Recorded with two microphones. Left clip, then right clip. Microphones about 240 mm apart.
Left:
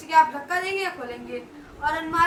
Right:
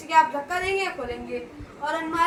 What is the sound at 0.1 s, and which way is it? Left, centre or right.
A child's voice, centre.